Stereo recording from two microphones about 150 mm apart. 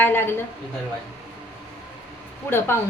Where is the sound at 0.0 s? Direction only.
15° left (ahead or behind).